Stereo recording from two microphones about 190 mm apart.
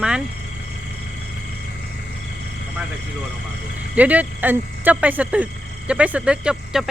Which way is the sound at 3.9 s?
10° right (ahead or behind).